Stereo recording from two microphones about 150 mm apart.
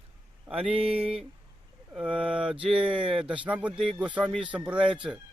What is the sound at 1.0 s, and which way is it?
Speech, 5° right (ahead or behind).